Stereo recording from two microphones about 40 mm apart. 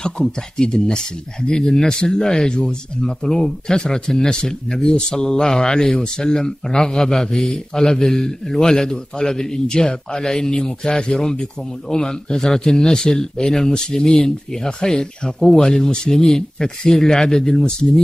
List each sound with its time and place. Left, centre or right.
0.0 s speech: centre